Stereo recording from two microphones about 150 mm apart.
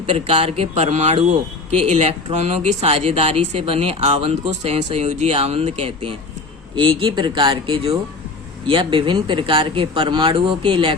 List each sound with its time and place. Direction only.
0.0 s speech: 40° right (ahead or behind)